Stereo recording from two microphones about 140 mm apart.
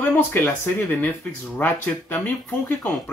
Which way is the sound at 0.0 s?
15° left (ahead or behind).